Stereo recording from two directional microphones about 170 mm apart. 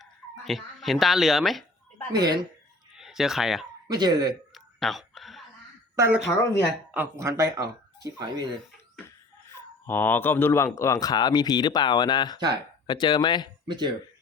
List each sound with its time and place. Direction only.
0.0 s speech: centre (ahead or behind)
2.1 s speech: 20° right (ahead or behind)
3.0 s speech: centre (ahead or behind)
3.8 s speech: 25° right (ahead or behind)
4.5 s whispering: centre (ahead or behind)
6.0 s speech: 10° right (ahead or behind); by 8.4 s 25° right (ahead or behind)
9.5 s speech: 15° left (ahead or behind)
13.7 s speech: 25° right (ahead or behind)